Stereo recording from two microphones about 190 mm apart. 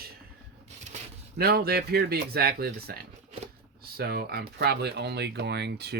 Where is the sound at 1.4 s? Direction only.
55° right (ahead or behind).